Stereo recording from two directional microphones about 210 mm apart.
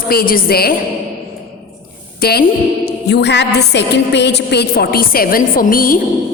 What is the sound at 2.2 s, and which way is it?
A woman's voice, 50° left (ahead or behind).